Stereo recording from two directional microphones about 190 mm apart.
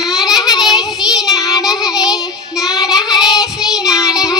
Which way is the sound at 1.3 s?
20° left (ahead or behind).